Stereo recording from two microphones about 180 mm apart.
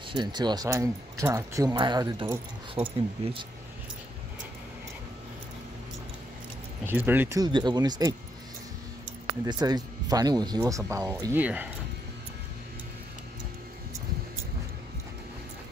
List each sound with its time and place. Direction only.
0.1 s speech: 25° right (ahead or behind)
2.8 s speech: 35° right (ahead or behind)
6.9 s speech: 10° right (ahead or behind)
9.4 s speech: 20° right (ahead or behind)